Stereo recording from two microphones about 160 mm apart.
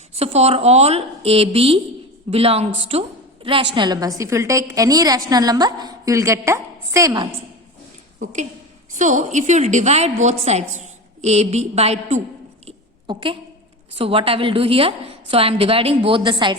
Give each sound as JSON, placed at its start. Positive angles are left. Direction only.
{"t": 0.2, "sound": "a woman's voice", "side_deg": -40}
{"t": 9.0, "sound": "a woman's voice", "side_deg": -50}
{"t": 12.6, "sound": "a sound", "side_deg": -30}
{"t": 13.9, "sound": "a woman's voice", "side_deg": -35}